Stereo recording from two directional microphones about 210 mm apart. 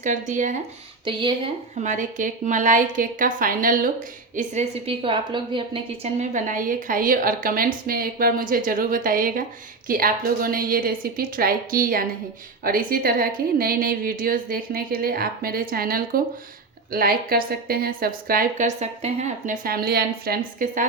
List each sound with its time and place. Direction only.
0.0 s a woman's voice: 35° right (ahead or behind)
1.0 s speech: 20° right (ahead or behind)
1.8 s a woman's voice: 35° right (ahead or behind)
4.4 s a woman's voice: 30° right (ahead or behind)
19.6 s a woman's voice: 45° right (ahead or behind)